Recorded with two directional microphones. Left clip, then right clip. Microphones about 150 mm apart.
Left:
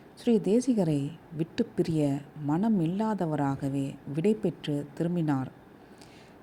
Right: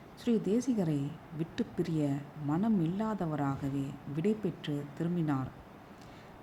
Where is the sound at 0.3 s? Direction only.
30° left (ahead or behind).